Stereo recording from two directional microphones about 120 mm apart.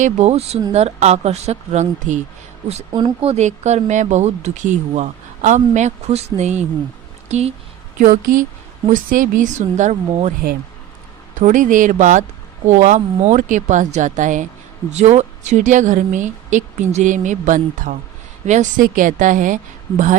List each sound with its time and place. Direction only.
0.0 s speech: 70° right (ahead or behind)
2.6 s a woman's voice: 60° right (ahead or behind)
7.9 s speech: 90° right
11.3 s speech: 90° right
14.8 s speech: 70° right (ahead or behind); by 19.5 s 90° right